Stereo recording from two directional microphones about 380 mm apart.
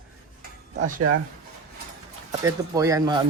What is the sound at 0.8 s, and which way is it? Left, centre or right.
Speech, right.